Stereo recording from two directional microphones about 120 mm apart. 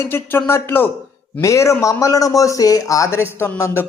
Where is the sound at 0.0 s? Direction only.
20° left (ahead or behind).